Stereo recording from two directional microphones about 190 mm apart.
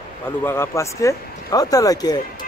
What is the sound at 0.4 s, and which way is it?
Speech, 15° left (ahead or behind).